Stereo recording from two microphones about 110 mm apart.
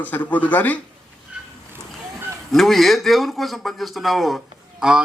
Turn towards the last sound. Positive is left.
turn(degrees=-5)  # may be behind; listen again after turning